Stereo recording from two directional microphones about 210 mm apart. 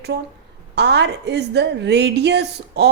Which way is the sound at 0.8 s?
55° right (ahead or behind).